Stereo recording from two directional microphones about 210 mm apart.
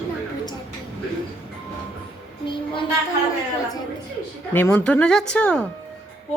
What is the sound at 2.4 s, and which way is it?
Child singing, 25° left (ahead or behind).